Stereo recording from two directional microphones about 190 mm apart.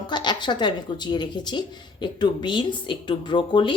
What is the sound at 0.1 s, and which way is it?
Speech, 25° left (ahead or behind).